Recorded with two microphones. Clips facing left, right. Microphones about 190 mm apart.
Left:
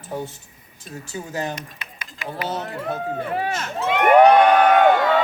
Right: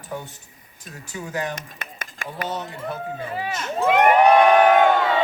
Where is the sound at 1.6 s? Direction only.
45° right (ahead or behind).